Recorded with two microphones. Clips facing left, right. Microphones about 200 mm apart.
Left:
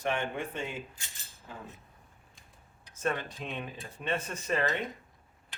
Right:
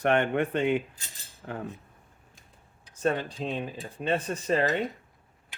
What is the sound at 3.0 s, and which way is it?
Speech, 30° right (ahead or behind).